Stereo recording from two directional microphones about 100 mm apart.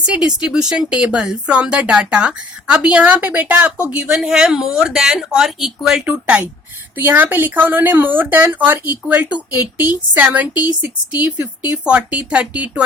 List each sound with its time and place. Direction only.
0.0 s speech: 10° right (ahead or behind)